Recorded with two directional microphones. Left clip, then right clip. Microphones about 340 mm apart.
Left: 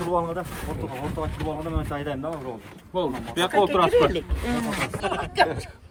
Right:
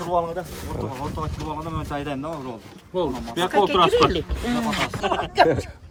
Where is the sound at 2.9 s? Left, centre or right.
Centre.